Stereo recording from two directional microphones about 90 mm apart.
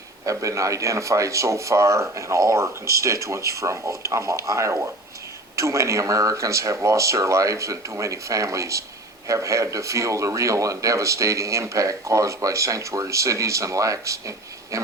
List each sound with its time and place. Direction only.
0.3 s a man's voice: 35° right (ahead or behind)